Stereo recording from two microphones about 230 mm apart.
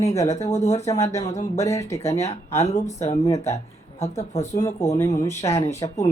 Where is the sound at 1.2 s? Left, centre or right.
Left.